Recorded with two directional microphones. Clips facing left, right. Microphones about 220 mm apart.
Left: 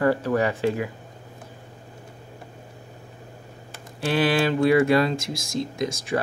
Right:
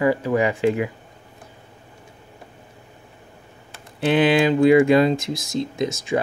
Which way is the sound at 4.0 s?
20° right (ahead or behind).